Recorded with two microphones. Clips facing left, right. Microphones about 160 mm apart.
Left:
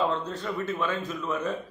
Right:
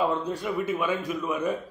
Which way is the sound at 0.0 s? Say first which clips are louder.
Right 2 dB; 10° right (ahead or behind).